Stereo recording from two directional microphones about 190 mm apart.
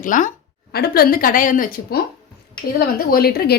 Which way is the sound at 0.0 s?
45° left (ahead or behind).